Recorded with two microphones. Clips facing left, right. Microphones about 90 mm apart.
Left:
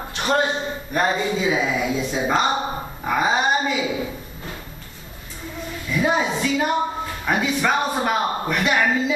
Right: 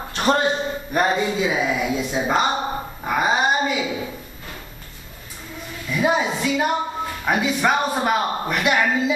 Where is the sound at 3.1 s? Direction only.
5° right (ahead or behind).